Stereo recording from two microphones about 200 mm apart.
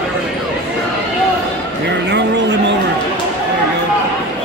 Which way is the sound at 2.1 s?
60° right (ahead or behind).